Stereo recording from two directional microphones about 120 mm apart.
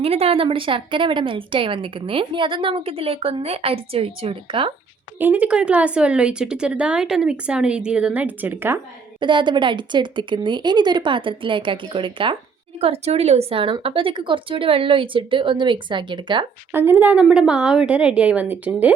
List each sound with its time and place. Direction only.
0.0 s speech: 55° right (ahead or behind)
5.2 s speech: 10° right (ahead or behind)
9.2 s speech: 40° right (ahead or behind)
12.8 s a woman's voice: 60° right (ahead or behind); by 16.5 s 40° right (ahead or behind)
16.7 s speech: 15° right (ahead or behind)